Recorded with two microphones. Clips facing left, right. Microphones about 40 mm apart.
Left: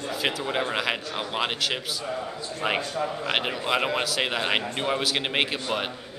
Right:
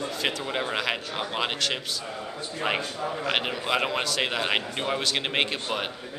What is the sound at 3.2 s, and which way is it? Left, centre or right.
A man's voice, centre.